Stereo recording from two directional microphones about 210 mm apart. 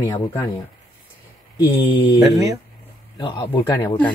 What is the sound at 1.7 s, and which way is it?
Speech, 25° left (ahead or behind).